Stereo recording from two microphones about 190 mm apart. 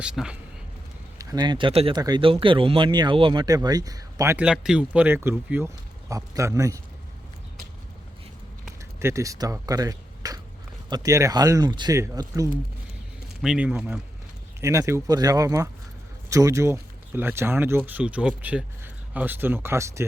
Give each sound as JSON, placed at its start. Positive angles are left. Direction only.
{"t": 0.0, "sound": "speech", "side_deg": -5}
{"t": 1.2, "sound": "speech", "side_deg": -20}
{"t": 4.4, "sound": "speech", "side_deg": -5}
{"t": 9.0, "sound": "speech", "side_deg": -15}
{"t": 13.4, "sound": "speech", "side_deg": -5}